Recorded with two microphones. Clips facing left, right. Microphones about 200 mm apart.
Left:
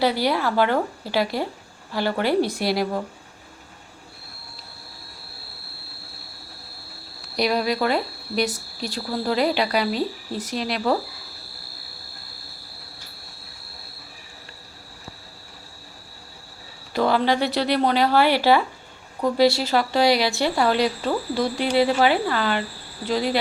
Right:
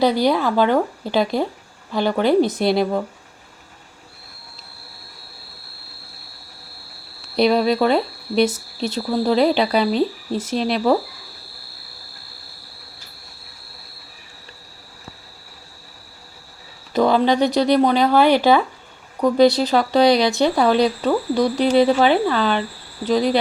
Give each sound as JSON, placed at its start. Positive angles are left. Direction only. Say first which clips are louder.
{"t": 0.0, "sound": "speech", "louder": "right 4 dB", "side_deg": -15}
{"t": 7.3, "sound": "speech", "louder": "right 6 dB", "side_deg": -30}
{"t": 16.9, "sound": "speech", "louder": "right 4 dB", "side_deg": -20}